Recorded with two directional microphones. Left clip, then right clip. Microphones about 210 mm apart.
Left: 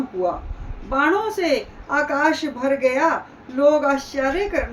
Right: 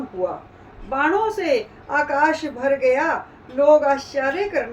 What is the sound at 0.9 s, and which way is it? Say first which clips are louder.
A woman's voice: even; 15° left (ahead or behind).